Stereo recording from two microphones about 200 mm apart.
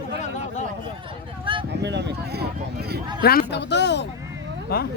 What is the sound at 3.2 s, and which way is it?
Speech, 55° left (ahead or behind).